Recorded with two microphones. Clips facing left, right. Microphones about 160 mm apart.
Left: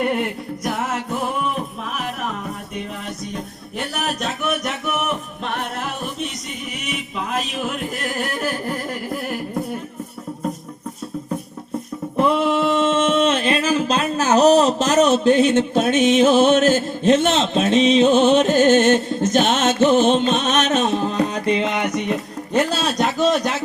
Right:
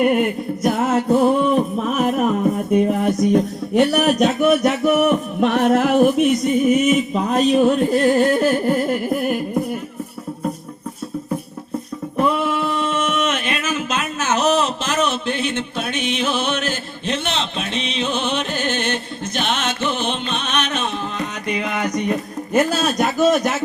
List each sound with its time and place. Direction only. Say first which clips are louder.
0.0 s music: right 5 dB; 20° right (ahead or behind); by 2.3 s 45° right (ahead or behind)
2.8 s music: right 13 dB; 55° right (ahead or behind)
3.8 s music: right 11 dB; 40° right (ahead or behind)
5.0 s a sound: right 9 dB; 50° right (ahead or behind)
6.7 s music: right 13 dB; 45° right (ahead or behind); by 9.4 s 20° right (ahead or behind)
12.1 s a sound: left 2 dB; 20° left (ahead or behind)
22.5 s a man's voice: right 2 dB; 5° right (ahead or behind)